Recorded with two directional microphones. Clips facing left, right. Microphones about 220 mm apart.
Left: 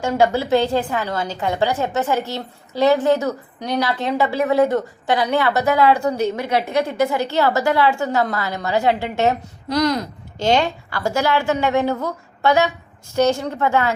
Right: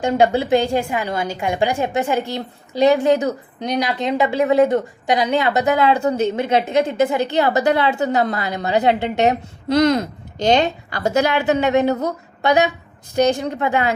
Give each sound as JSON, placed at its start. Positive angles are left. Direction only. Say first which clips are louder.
{"t": 0.0, "sound": "a woman's voice", "louder": "right 2 dB", "side_deg": -20}